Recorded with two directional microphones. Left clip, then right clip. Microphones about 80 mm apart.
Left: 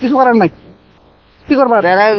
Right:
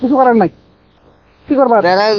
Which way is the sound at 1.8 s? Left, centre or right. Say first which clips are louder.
Left 1 dB; centre.